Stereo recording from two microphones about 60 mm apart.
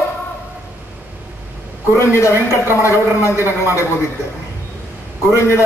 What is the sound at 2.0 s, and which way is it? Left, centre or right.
A man's voice, left.